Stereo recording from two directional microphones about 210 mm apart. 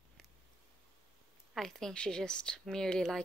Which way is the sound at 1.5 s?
Centre (ahead or behind).